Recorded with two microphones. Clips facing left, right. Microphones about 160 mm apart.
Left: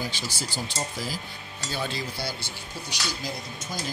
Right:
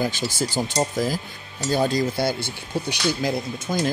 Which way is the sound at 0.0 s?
50° right (ahead or behind).